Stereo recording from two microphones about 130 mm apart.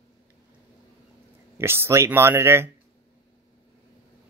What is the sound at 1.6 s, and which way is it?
Speech, 20° right (ahead or behind).